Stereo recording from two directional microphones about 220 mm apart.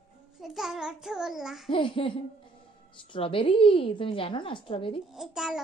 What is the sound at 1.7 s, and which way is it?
A woman's voice, 25° left (ahead or behind).